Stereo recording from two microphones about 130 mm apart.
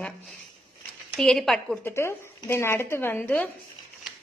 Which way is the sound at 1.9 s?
20° left (ahead or behind).